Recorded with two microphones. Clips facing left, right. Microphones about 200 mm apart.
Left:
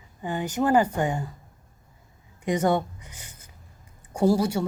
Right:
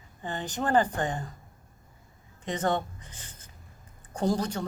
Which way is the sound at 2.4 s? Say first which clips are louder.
Left 5 dB; 10° left (ahead or behind).